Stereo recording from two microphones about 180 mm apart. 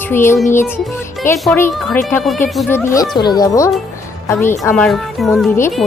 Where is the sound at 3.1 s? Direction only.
25° left (ahead or behind).